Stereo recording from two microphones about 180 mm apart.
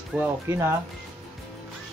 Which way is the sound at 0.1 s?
5° right (ahead or behind).